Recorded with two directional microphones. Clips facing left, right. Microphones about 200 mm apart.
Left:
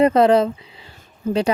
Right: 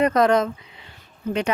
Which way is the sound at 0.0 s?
30° left (ahead or behind).